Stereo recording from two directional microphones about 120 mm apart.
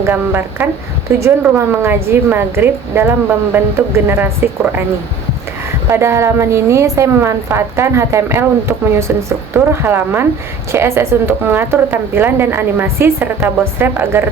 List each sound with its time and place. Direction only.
0.0 s speech: 15° right (ahead or behind)
5.9 s speech: 25° right (ahead or behind)